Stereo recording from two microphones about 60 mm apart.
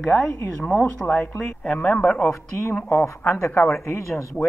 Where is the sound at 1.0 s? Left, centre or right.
Left.